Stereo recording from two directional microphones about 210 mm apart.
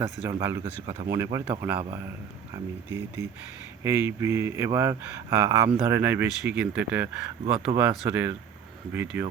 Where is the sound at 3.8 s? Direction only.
10° right (ahead or behind).